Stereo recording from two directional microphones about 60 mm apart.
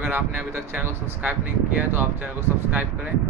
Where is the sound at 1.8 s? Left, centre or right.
Right.